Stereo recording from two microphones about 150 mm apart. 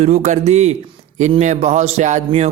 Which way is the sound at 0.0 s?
50° right (ahead or behind).